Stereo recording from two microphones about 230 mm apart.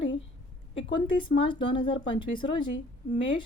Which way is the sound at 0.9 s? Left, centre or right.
Left.